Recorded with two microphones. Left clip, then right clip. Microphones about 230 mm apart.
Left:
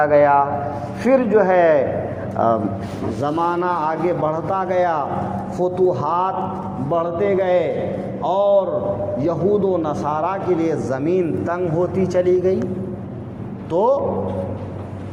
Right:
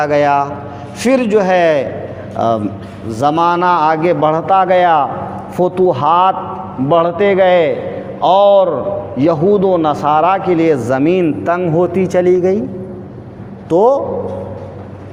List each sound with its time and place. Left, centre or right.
0.0 s a man's voice: right
13.7 s a man's voice: right